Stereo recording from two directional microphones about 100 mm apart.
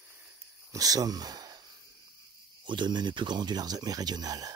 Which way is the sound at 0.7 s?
40° right (ahead or behind).